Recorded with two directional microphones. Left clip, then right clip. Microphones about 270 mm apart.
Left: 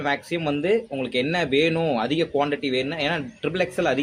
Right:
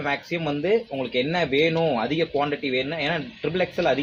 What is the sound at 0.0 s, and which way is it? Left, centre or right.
Speech, centre.